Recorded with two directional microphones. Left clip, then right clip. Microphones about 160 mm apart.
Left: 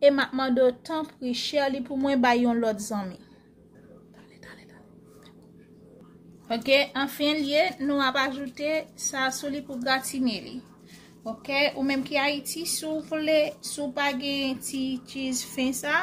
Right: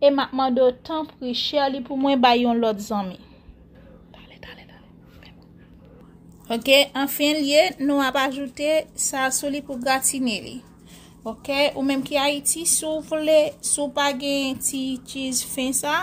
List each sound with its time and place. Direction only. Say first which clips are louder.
0.0 s a woman's voice: right 3 dB; 5° right (ahead or behind); by 3.2 s 25° right (ahead or behind)
6.4 s a woman's voice: right 5 dB; 50° right (ahead or behind)